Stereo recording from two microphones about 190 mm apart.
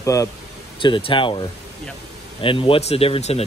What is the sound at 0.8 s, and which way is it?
Speech, 25° left (ahead or behind).